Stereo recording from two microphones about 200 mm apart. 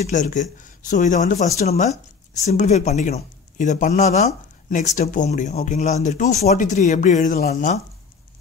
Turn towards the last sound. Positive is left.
turn(degrees=40)  # may be behind; listen again after turning